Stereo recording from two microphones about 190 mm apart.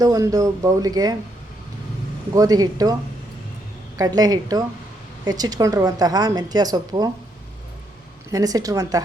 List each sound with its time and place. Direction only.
0.0 s a woman's voice: 20° right (ahead or behind)
2.3 s a woman's voice: 20° right (ahead or behind)
3.9 s a woman's voice: 20° right (ahead or behind)
8.3 s a woman's voice: 20° right (ahead or behind)